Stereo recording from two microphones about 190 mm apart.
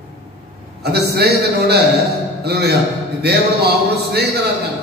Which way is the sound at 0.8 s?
60° right (ahead or behind).